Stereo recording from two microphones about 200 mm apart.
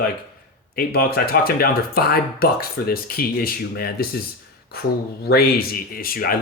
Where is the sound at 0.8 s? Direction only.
50° left (ahead or behind).